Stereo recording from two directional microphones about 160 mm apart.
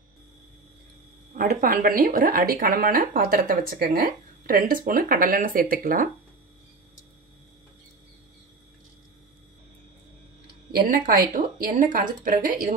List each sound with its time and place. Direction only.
1.3 s speech: 60° right (ahead or behind)
10.7 s speech: 60° right (ahead or behind)